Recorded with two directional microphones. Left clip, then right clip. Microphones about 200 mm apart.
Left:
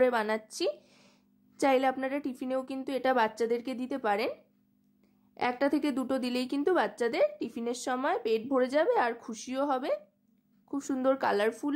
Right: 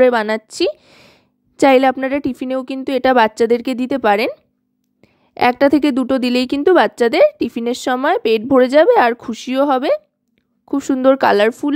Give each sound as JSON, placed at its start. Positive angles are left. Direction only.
{"t": 0.0, "sound": "a woman's voice", "side_deg": -40}